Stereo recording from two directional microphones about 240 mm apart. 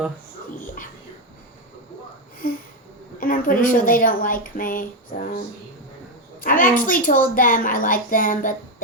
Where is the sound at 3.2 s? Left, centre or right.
Left.